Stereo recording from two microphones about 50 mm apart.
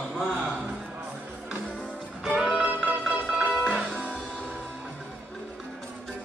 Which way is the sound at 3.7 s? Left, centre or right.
Centre.